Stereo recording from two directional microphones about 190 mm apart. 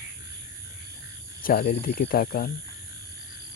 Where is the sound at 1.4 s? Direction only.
50° left (ahead or behind).